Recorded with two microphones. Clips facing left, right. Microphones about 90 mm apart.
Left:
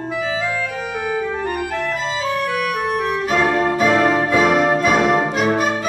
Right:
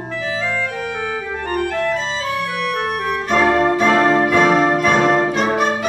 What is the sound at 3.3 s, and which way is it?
Brass instrument, centre (ahead or behind).